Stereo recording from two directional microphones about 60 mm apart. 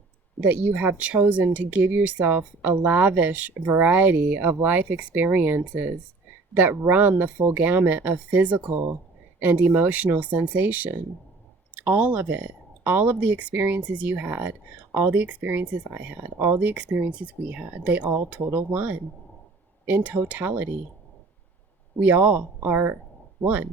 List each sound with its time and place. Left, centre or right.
0.4 s speech: right
22.0 s speech: right